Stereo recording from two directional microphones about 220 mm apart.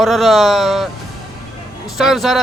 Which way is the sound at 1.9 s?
Centre (ahead or behind).